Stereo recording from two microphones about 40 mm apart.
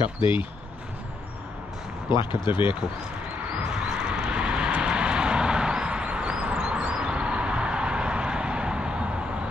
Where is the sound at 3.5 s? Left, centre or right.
Right.